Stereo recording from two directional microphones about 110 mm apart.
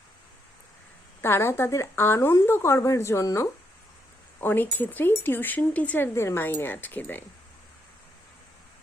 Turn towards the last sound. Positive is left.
turn(degrees=15)  # may be behind; listen again after turning